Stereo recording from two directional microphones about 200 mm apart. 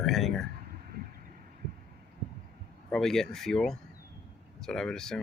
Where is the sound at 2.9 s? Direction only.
Centre (ahead or behind).